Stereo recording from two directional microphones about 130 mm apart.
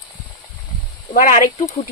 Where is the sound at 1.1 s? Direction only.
85° left.